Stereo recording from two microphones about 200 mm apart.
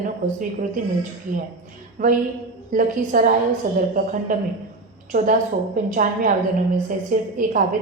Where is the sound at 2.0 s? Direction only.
40° right (ahead or behind).